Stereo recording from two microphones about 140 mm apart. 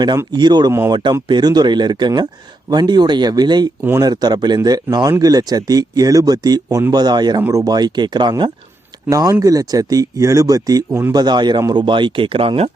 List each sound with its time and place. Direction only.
0.3 s speech: 30° right (ahead or behind)
0.7 s speech: 20° right (ahead or behind)
1.3 s speech: 30° right (ahead or behind)